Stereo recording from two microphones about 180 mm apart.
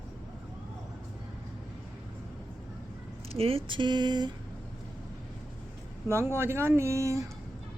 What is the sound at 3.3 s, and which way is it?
Speech, 30° right (ahead or behind).